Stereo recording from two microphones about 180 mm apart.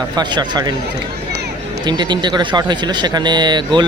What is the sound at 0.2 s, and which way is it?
Speech, 25° right (ahead or behind).